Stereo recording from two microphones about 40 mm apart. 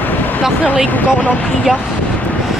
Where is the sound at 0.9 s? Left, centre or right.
Left.